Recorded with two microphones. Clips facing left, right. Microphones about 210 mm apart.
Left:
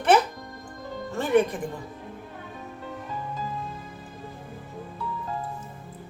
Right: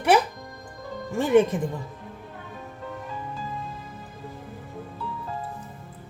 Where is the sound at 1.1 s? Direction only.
20° right (ahead or behind).